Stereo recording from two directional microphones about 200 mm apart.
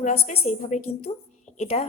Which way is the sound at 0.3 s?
35° left (ahead or behind).